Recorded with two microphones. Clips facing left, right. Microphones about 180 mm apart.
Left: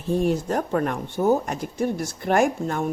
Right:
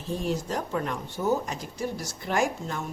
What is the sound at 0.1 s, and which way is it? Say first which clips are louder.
A woman's voice: left 7 dB; 55° left (ahead or behind).